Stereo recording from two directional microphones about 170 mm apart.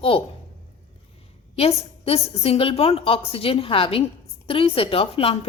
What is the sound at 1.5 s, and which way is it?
Speech, 35° left (ahead or behind).